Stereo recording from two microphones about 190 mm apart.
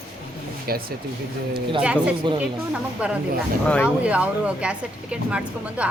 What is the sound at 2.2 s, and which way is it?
Speech, 25° right (ahead or behind).